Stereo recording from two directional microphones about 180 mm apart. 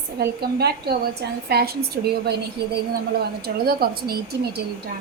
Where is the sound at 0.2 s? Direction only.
60° right (ahead or behind).